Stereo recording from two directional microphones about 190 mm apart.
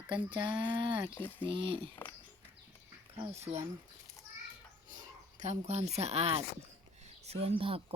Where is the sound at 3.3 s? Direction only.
35° right (ahead or behind).